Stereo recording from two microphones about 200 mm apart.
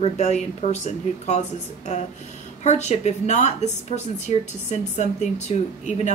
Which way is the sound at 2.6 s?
35° left (ahead or behind).